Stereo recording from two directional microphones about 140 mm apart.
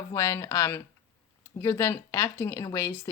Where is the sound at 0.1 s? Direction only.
20° left (ahead or behind).